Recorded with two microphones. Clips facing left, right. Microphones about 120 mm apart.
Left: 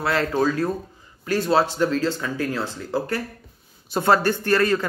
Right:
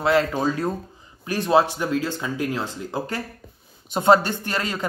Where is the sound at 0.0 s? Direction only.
20° right (ahead or behind).